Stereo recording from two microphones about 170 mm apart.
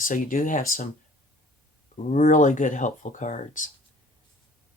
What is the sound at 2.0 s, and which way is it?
Speech, 45° left (ahead or behind).